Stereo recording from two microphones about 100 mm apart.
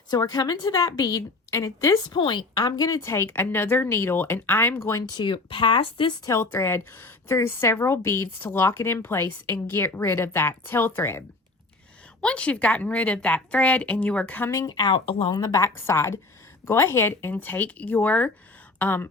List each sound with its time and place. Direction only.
0.1 s a woman's voice: 40° left (ahead or behind)
2.1 s speech: 50° left (ahead or behind); by 5.0 s 25° left (ahead or behind)
5.0 s speech: 45° left (ahead or behind)
6.2 s speech: 25° left (ahead or behind)
12.2 s speech: 10° left (ahead or behind)
14.5 s speech: 40° left (ahead or behind)
14.9 s speech: 65° left (ahead or behind)
15.4 s a woman's voice: 40° left (ahead or behind)
15.6 s speech: 25° left (ahead or behind)